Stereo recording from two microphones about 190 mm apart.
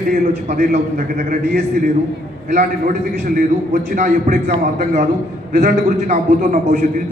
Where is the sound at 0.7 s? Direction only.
40° right (ahead or behind).